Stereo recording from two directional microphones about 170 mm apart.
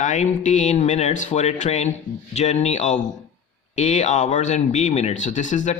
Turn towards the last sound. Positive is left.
turn(degrees=45)  # may be behind; listen again after turning